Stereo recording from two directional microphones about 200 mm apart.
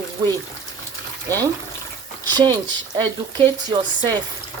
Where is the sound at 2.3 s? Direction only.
20° right (ahead or behind).